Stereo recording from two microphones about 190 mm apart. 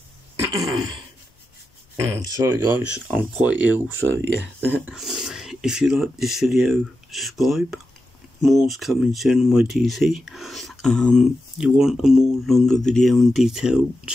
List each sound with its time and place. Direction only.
0.5 s throat clearing: 20° right (ahead or behind)
2.0 s speech: 15° right (ahead or behind)